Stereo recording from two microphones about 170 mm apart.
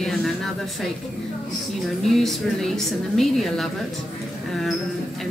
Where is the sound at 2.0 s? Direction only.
Centre (ahead or behind).